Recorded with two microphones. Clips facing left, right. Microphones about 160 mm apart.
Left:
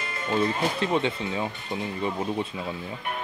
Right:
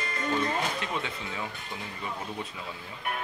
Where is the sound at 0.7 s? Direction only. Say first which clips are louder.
Left 8 dB; 30° left (ahead or behind).